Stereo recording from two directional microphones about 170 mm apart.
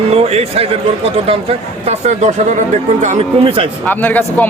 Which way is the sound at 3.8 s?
10° left (ahead or behind).